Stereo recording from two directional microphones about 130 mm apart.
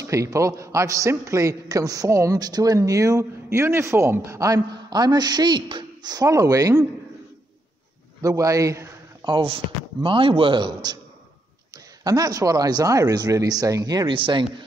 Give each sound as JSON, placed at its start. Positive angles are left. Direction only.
{"t": 0.0, "sound": "a man's voice", "side_deg": -25}
{"t": 8.2, "sound": "a man's voice", "side_deg": -25}
{"t": 9.2, "sound": "a man's voice", "side_deg": -35}